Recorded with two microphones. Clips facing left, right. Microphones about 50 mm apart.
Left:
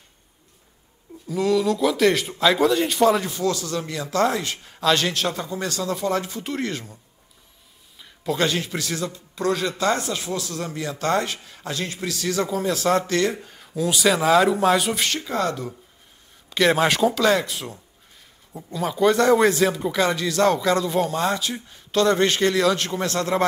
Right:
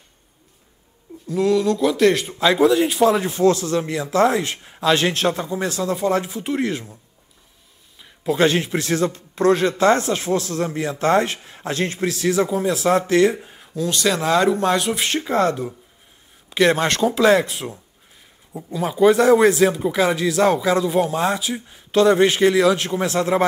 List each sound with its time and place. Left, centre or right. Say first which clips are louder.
1.2 s speech: right 2 dB; centre
3.3 s speech: right 7 dB; right
5.4 s speech: right 4 dB; centre
6.3 s speech: right 5 dB; centre
8.0 s a sound: right 4 dB; centre
8.4 s speech: right 6 dB; right
12.3 s speech: right 4 dB; centre
13.7 s speech: even; centre
15.0 s speech: right 5 dB; right
16.4 s a sound: right 3 dB; centre
16.7 s speech: even; centre
17.1 s speech: right 4 dB; right
18.5 s speech: right 2 dB; centre